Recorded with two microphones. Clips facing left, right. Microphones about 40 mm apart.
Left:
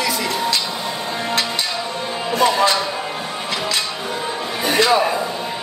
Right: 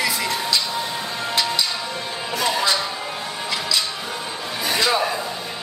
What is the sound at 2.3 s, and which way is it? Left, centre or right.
Speech, left.